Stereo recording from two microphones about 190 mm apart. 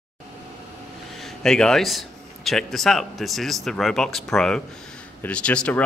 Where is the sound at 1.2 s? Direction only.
5° left (ahead or behind).